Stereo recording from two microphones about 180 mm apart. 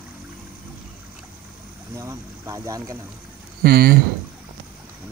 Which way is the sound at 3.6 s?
60° right (ahead or behind).